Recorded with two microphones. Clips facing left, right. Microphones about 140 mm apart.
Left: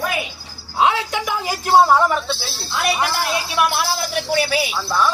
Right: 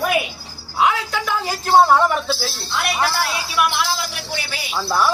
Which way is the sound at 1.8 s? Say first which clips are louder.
Even; centre (ahead or behind).